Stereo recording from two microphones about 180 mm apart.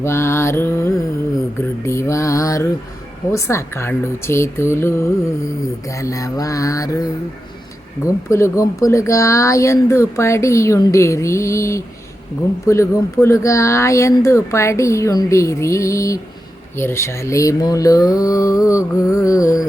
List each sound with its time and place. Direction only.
0.0 s speech: 15° left (ahead or behind)
1.5 s mantra: 15° left (ahead or behind)
3.3 s speech: 15° left (ahead or behind)
6.0 s mantra: 20° left (ahead or behind)
8.0 s speech: 15° left (ahead or behind)